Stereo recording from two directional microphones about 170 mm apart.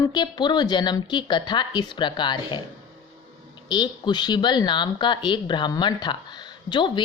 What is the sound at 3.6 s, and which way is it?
Speech, 25° left (ahead or behind).